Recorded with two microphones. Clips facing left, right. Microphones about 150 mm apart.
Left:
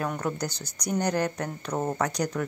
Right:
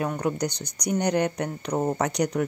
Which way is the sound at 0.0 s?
15° right (ahead or behind).